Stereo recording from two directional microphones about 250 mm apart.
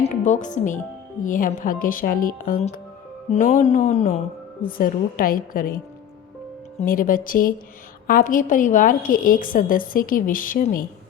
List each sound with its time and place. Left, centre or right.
0.0 s a woman's voice: left